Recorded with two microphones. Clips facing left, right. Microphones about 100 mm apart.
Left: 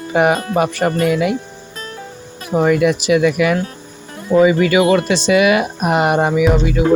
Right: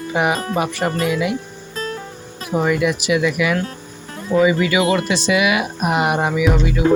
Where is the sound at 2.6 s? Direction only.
35° left (ahead or behind).